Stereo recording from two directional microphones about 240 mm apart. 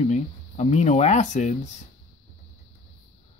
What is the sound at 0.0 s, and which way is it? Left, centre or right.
Speech, left.